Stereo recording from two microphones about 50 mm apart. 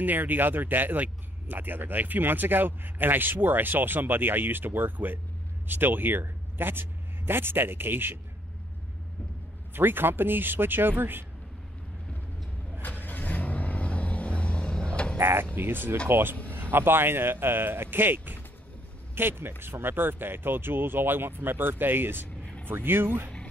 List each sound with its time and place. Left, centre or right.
0.0 s speech: right
9.8 s speech: right
12.8 s vehicle: left
15.1 s speech: right
15.5 s speech: right
22.4 s vehicle: left
22.7 s speech: right